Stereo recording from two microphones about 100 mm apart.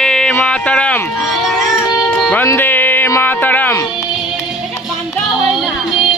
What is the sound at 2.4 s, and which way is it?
Music, 20° left (ahead or behind).